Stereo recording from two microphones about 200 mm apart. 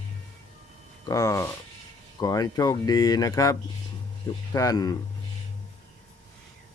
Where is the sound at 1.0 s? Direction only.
15° left (ahead or behind).